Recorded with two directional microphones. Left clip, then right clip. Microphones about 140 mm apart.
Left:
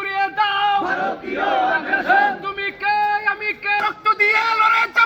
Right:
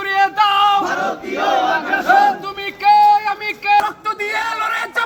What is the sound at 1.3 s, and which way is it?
Battle cry, 20° right (ahead or behind).